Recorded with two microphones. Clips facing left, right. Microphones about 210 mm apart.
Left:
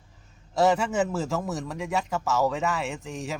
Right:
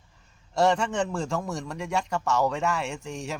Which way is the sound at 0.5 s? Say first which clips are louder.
Left 1 dB; 5° left (ahead or behind).